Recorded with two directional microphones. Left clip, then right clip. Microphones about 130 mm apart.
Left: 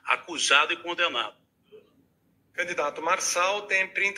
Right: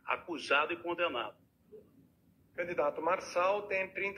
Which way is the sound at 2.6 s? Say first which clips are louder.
Left 5 dB; 25° left (ahead or behind).